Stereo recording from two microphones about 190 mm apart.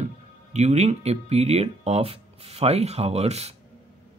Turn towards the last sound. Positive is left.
turn(degrees=-35)  # may be behind; listen again after turning